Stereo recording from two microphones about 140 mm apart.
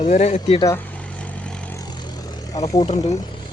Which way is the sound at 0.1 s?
55° left (ahead or behind).